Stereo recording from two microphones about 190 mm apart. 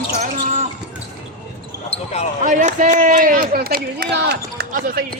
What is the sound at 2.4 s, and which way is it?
Speech, 40° right (ahead or behind).